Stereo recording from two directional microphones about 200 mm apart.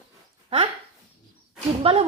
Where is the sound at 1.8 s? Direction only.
30° right (ahead or behind).